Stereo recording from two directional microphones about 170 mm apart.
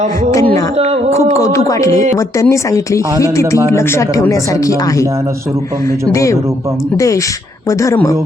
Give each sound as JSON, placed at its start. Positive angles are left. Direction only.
{"t": 0.3, "sound": "speech", "side_deg": 20}
{"t": 6.1, "sound": "speech", "side_deg": 20}